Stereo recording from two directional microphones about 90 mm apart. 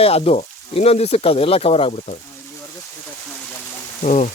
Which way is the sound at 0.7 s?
90° left.